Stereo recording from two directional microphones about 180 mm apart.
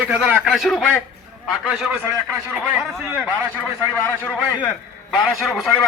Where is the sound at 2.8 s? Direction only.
Centre (ahead or behind).